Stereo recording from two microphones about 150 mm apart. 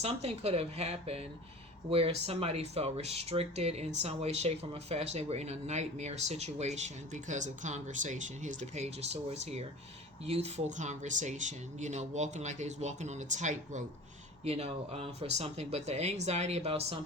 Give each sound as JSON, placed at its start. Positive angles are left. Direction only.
{"t": 0.0, "sound": "speech", "side_deg": -45}
{"t": 14.4, "sound": "speech", "side_deg": -45}